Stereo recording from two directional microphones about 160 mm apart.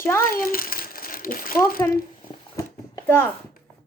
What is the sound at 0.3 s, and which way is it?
Crumpling, 65° left (ahead or behind).